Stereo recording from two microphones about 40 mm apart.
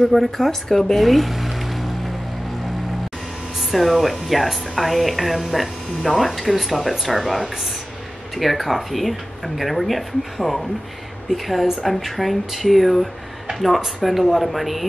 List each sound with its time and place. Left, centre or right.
0.0 s speech: centre
3.5 s speech: centre